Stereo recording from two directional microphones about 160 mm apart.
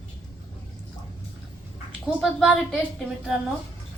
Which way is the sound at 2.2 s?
5° right (ahead or behind).